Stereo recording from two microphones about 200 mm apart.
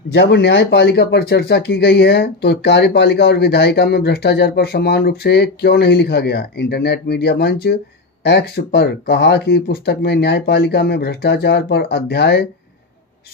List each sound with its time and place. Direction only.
0.1 s speech: 55° left (ahead or behind)